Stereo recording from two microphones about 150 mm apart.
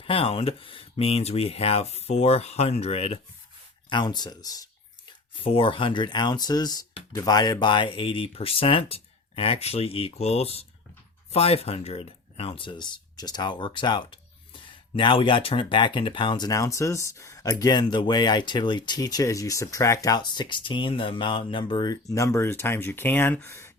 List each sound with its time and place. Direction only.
0.0 s speech: 40° left (ahead or behind)
3.8 s speech: 30° left (ahead or behind)
5.4 s speech: 35° left (ahead or behind); by 23.7 s 20° left (ahead or behind)